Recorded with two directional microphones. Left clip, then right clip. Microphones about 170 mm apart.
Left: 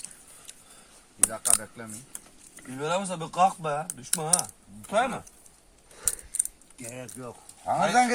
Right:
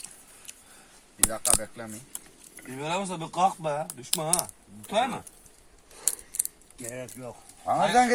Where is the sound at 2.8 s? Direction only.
15° left (ahead or behind).